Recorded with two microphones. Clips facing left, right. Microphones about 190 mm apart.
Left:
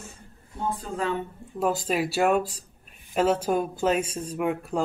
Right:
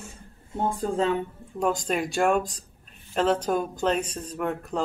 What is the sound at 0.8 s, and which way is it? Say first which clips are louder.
Speech: right 6 dB; 30° right (ahead or behind).